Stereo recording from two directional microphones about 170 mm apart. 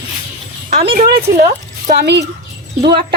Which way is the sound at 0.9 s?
60° right (ahead or behind).